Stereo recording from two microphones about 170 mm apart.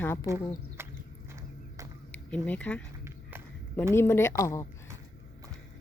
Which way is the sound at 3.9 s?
15° left (ahead or behind).